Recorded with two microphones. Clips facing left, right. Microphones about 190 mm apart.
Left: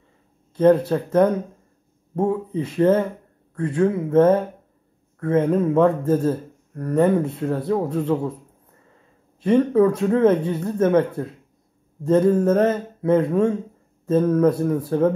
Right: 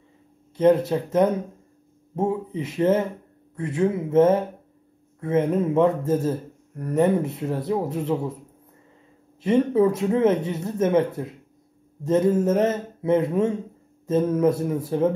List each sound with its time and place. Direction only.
0.6 s speech: 20° right (ahead or behind)
9.4 s speech: 25° right (ahead or behind)